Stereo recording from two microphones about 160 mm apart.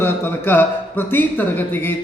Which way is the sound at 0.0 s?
15° left (ahead or behind).